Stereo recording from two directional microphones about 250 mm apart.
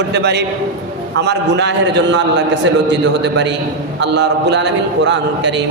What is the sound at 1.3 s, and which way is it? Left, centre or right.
A man's voice, right.